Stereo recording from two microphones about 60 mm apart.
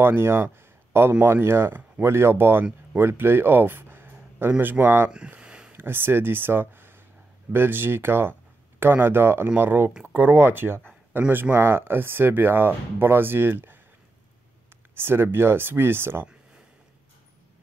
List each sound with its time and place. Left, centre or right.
0.0 s speech: right
5.4 s a sound: centre
5.7 s speech: right
15.0 s speech: right